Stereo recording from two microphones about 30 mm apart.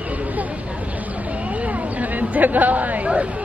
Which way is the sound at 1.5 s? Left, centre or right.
Right.